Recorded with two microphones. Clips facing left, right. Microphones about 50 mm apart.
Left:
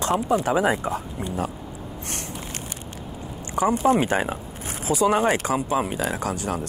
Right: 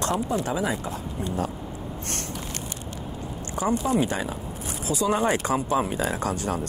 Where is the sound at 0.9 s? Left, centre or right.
Left.